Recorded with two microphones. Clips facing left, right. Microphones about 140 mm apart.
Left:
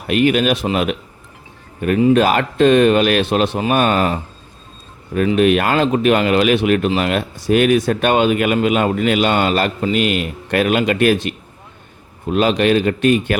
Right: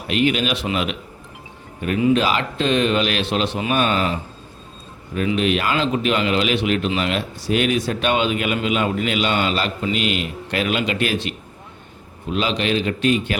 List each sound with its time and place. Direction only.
0.1 s speech: 50° left (ahead or behind)